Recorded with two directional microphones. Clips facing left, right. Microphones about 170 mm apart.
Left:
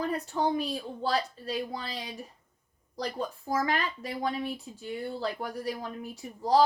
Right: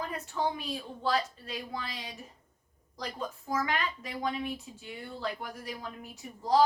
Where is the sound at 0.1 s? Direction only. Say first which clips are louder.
Left 4 dB; 35° left (ahead or behind).